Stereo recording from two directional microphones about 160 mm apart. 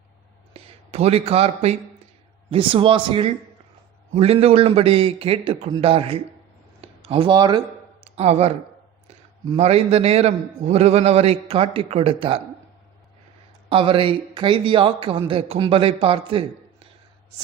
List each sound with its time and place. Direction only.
0.5 s a man's voice: 40° right (ahead or behind)
8.0 s a man's voice: 40° right (ahead or behind)
13.7 s a man's voice: 35° right (ahead or behind)